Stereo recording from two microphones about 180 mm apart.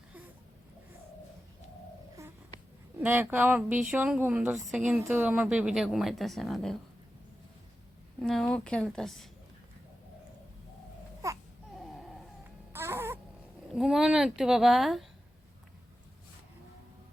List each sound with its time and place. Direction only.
3.0 s a woman's voice: 10° right (ahead or behind)
8.2 s a woman's voice: 5° left (ahead or behind)
11.2 s baby cry: 15° right (ahead or behind)
11.8 s a sound: centre (ahead or behind)
12.7 s a sound: 15° right (ahead or behind)
13.7 s a woman's voice: centre (ahead or behind)